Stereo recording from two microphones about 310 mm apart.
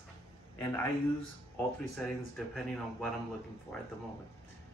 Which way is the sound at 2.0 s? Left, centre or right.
Centre.